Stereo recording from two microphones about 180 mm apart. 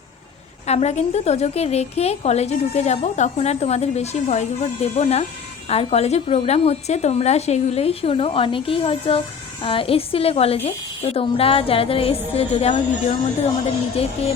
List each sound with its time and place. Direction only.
0.7 s a woman's voice: 35° left (ahead or behind)